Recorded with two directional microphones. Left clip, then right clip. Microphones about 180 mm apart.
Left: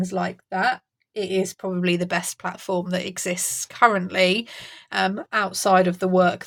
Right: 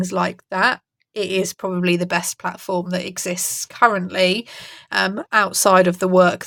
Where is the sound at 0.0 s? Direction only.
40° right (ahead or behind).